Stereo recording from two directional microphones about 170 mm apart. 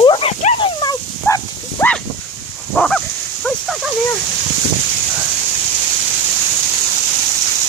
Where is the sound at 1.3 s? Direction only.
10° left (ahead or behind).